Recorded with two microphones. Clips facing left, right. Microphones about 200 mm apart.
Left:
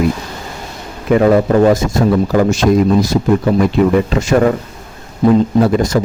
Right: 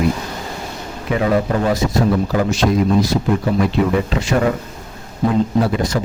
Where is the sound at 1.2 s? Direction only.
50° left (ahead or behind).